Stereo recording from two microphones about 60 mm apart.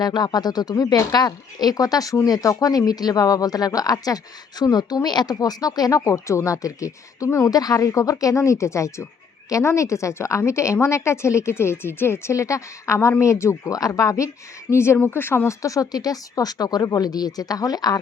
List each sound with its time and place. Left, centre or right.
0.3 s a woman's voice: left
13.7 s speech: left
14.7 s speech: left
15.4 s speech: left